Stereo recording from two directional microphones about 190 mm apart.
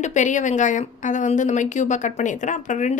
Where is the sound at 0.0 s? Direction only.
40° left (ahead or behind).